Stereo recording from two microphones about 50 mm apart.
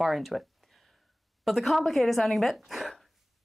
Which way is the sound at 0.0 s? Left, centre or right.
Centre.